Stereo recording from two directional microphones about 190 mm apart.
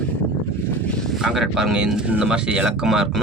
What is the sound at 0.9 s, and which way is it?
Speech, centre (ahead or behind).